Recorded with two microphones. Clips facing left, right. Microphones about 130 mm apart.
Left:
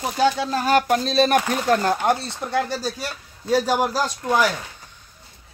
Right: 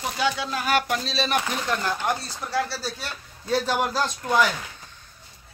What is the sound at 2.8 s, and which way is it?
A man's voice, 10° left (ahead or behind).